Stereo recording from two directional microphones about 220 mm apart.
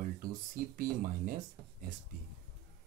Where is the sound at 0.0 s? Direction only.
40° right (ahead or behind).